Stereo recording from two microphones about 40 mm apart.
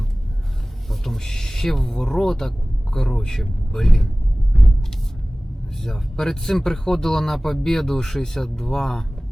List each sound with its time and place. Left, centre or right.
0.9 s a sound: centre
2.0 s speech: centre
5.8 s speech: centre